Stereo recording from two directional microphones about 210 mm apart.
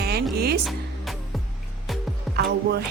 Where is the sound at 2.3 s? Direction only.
50° right (ahead or behind).